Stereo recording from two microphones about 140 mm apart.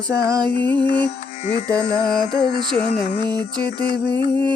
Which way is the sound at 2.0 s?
30° right (ahead or behind).